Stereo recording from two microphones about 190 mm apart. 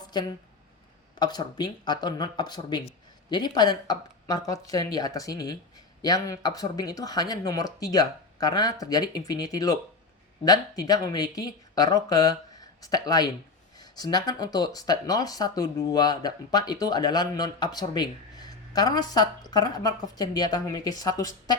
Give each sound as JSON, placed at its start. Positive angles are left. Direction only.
{"t": 0.1, "sound": "speech", "side_deg": 20}